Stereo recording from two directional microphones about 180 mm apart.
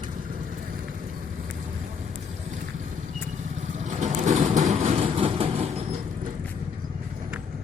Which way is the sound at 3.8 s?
40° right (ahead or behind).